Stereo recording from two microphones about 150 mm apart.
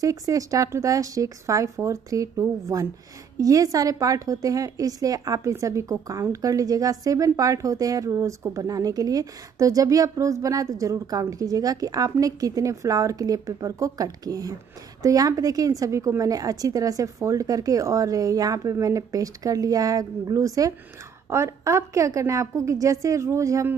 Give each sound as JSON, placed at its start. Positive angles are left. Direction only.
{"t": 0.0, "sound": "a woman's voice", "side_deg": -25}